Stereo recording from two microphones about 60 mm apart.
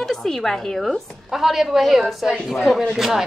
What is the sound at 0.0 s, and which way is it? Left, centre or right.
A woman's voice, centre.